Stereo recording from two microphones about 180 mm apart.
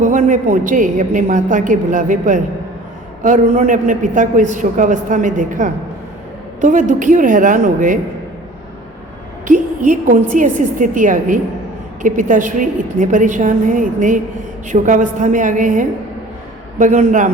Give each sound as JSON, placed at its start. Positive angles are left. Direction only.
{"t": 0.0, "sound": "a man's voice", "side_deg": -45}
{"t": 9.5, "sound": "a man's voice", "side_deg": -45}